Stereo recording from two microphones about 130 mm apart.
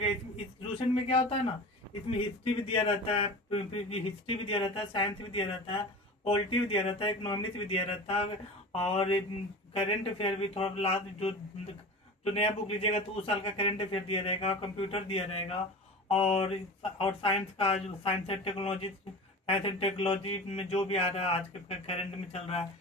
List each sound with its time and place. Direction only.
0.8 s speech: 45° left (ahead or behind)